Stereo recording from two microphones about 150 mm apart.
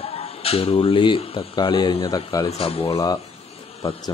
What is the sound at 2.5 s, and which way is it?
Speech, 40° left (ahead or behind).